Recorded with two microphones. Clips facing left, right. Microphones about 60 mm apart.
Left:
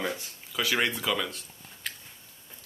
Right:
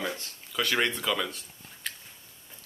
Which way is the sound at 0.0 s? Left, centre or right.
Centre.